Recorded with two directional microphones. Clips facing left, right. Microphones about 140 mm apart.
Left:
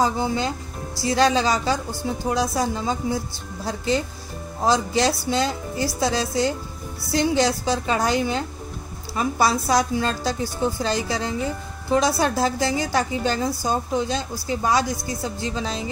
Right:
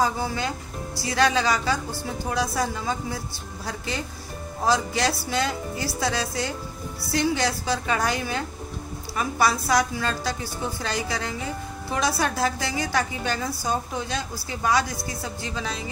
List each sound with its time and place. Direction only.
0.0 s a woman's voice: 20° left (ahead or behind)